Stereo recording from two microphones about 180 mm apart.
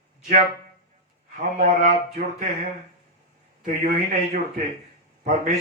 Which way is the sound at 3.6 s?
50° right (ahead or behind).